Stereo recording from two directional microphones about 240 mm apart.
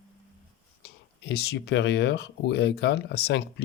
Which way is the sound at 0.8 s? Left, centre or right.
Left.